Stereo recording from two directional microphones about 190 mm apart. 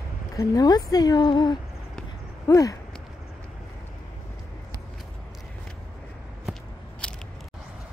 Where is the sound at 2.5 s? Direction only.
15° left (ahead or behind).